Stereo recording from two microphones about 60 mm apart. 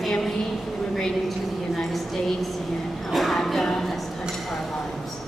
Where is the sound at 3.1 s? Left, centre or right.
Centre.